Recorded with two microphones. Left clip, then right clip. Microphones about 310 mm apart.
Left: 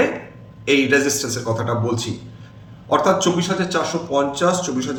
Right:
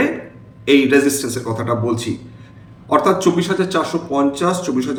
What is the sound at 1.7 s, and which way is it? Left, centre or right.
A man's voice, centre.